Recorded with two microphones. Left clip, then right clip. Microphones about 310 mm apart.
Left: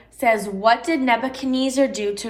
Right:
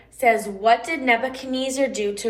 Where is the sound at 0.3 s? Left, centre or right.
Centre.